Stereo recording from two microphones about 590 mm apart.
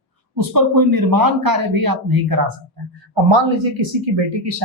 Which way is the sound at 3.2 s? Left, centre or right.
Right.